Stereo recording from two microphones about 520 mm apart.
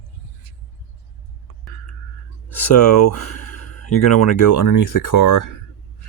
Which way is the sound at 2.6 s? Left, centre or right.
Left.